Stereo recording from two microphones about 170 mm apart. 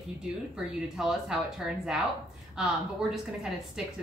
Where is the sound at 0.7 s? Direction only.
5° right (ahead or behind).